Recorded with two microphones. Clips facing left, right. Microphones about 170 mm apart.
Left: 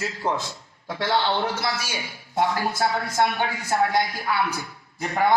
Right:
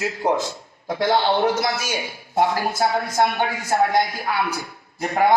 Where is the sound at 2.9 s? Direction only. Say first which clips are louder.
Right 3 dB; 50° right (ahead or behind).